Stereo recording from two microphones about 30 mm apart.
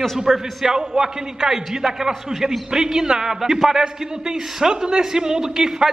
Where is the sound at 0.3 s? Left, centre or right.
Centre.